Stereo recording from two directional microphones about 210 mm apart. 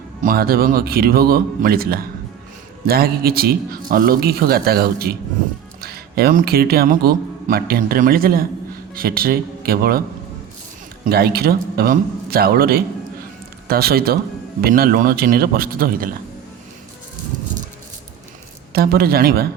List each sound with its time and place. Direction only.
0.2 s a man's voice: 45° right (ahead or behind)
11.0 s a man's voice: 50° right (ahead or behind)
18.7 s a man's voice: 45° right (ahead or behind)